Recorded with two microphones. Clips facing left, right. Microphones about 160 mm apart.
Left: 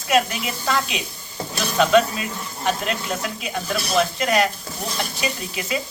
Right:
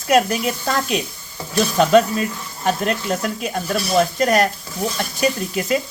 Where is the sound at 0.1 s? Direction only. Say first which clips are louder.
Right 4 dB; 45° right (ahead or behind).